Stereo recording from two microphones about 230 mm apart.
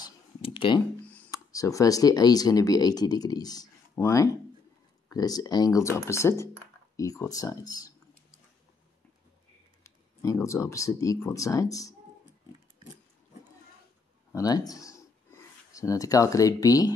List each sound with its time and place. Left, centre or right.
0.0 s clicking: left
1.0 s speech: centre
9.8 s speech: centre
14.3 s speech: centre